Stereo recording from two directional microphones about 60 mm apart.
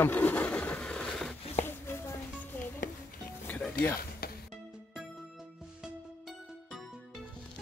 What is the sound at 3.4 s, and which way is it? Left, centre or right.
Music, left.